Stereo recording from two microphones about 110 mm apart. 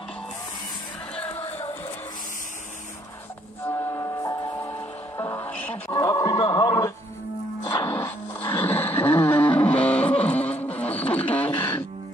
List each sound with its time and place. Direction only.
3.6 s music: 25° left (ahead or behind)
5.2 s music: 20° left (ahead or behind)
5.9 s speech: 30° left (ahead or behind)
6.4 s a sound: 40° left (ahead or behind)
7.8 s music: 25° left (ahead or behind)